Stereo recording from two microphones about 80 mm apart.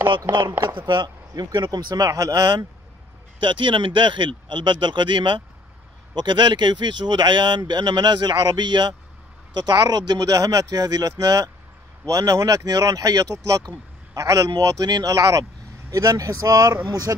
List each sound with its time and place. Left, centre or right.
0.3 s speech: right
3.3 s speech: right
6.1 s speech: right